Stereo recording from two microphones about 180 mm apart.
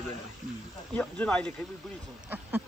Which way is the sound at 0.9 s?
5° left (ahead or behind).